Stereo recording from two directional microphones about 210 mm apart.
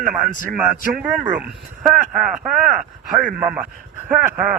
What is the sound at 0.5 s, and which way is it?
Speech, 5° right (ahead or behind).